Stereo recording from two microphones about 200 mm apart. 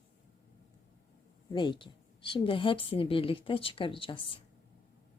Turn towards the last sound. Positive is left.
turn(degrees=25)  # may be behind; listen again after turning